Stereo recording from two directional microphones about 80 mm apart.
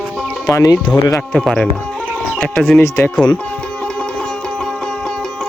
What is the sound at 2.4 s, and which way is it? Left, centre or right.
Speech, centre.